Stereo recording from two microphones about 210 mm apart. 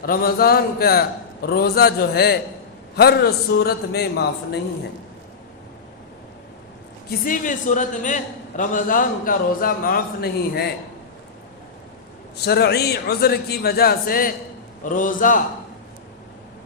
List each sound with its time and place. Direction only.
0.0 s a man's voice: 45° left (ahead or behind)
7.3 s a man's voice: 40° left (ahead or behind)
12.5 s a man's voice: 50° left (ahead or behind)